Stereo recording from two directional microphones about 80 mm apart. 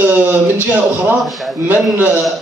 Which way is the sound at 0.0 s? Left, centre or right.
Right.